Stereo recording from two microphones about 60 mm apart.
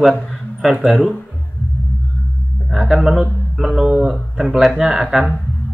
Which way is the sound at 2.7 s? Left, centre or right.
Centre.